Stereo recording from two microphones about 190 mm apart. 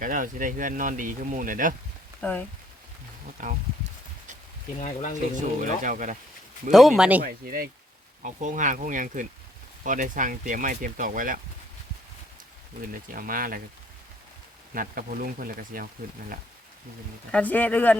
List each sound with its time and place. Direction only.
0.0 s speech: 45° right (ahead or behind)
2.2 s speech: 10° left (ahead or behind)
3.4 s speech: 45° right (ahead or behind)
4.8 s speech: 40° left (ahead or behind)
5.5 s speech: 40° right (ahead or behind)
6.7 s speech: centre (ahead or behind)
7.2 s speech: 50° right (ahead or behind)
12.9 s speech: 45° right (ahead or behind)
14.7 s speech: 50° right (ahead or behind)
17.3 s speech: 10° left (ahead or behind)